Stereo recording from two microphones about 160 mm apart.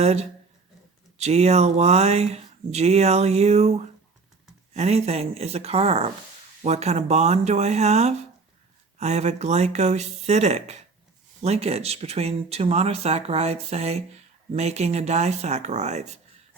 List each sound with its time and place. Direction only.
0.0 s speech: 40° right (ahead or behind)